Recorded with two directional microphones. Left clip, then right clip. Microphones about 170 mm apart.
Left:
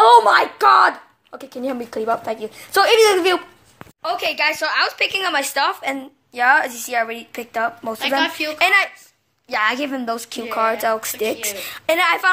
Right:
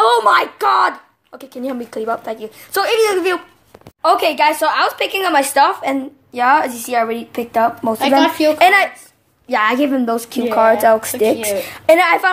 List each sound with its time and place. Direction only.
0.0 s a woman's voice: 5° right (ahead or behind)
8.2 s a woman's voice: 40° right (ahead or behind)
8.5 s a woman's voice: 10° right (ahead or behind)